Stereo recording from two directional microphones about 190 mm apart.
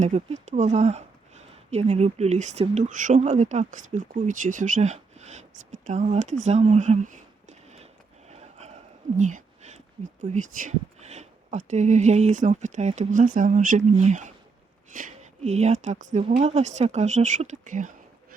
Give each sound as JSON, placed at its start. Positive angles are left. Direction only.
{"t": 0.0, "sound": "speech", "side_deg": -40}
{"t": 8.3, "sound": "a sound", "side_deg": -35}
{"t": 10.2, "sound": "speech", "side_deg": -40}